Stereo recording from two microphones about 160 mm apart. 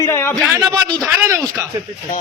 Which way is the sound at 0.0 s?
15° left (ahead or behind).